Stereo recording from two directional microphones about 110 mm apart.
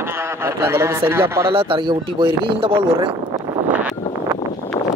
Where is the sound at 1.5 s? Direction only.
50° right (ahead or behind).